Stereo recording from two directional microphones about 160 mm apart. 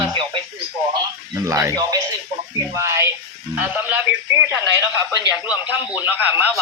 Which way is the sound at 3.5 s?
10° right (ahead or behind).